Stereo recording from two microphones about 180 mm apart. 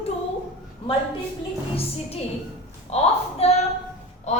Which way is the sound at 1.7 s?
35° left (ahead or behind).